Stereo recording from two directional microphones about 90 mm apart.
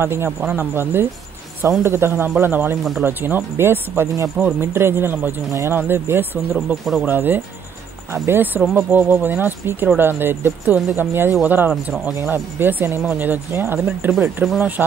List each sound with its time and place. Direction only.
0.0 s speech: 25° right (ahead or behind)
5.5 s speech: 35° right (ahead or behind)
6.7 s speech: centre (ahead or behind)
7.1 s speech: 20° right (ahead or behind)
14.4 s speech: centre (ahead or behind)
14.8 s speech: 20° right (ahead or behind)